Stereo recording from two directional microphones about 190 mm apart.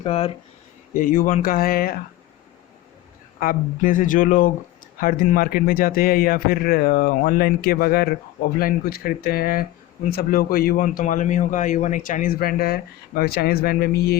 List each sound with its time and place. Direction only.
0.0 s speech: 30° left (ahead or behind)
0.9 s speech: 45° left (ahead or behind)
3.4 s speech: 45° left (ahead or behind)